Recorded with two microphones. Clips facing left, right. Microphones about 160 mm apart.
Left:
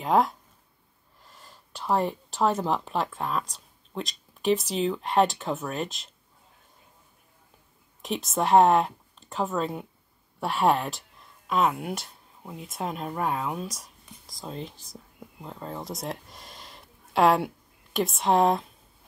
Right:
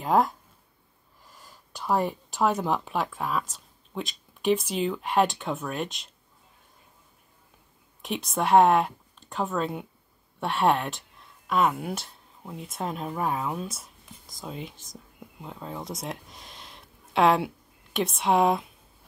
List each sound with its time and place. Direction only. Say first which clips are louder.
0.0 s speech: even; centre (ahead or behind)
8.0 s speech: left 1 dB; centre (ahead or behind)